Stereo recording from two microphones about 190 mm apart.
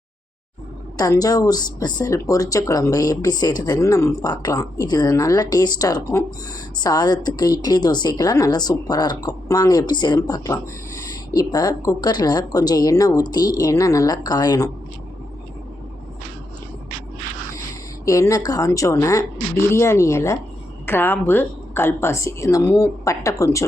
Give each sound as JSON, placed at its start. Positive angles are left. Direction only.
{"t": 0.9, "sound": "speech", "side_deg": 20}
{"t": 18.0, "sound": "a woman's voice", "side_deg": 15}